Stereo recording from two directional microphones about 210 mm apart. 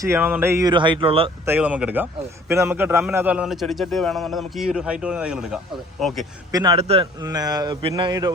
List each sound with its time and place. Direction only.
0.0 s speech: 10° right (ahead or behind); by 1.3 s 25° right (ahead or behind)
1.5 s a man's voice: 10° right (ahead or behind)
6.5 s a man's voice: 15° right (ahead or behind)
6.7 s speech: 30° right (ahead or behind)
7.2 s speech: 20° right (ahead or behind)